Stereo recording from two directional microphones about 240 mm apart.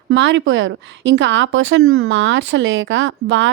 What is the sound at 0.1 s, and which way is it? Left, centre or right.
Speech, right.